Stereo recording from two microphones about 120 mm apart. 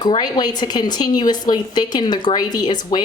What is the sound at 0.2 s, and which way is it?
A woman's voice, 35° left (ahead or behind).